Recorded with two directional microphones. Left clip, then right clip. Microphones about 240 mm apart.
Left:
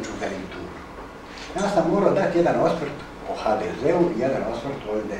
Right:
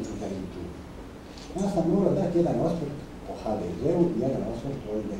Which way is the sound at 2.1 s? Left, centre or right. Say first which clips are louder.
Left 6 dB; centre.